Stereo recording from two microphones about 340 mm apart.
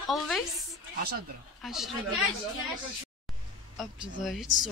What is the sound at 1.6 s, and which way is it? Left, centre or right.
Speech, centre.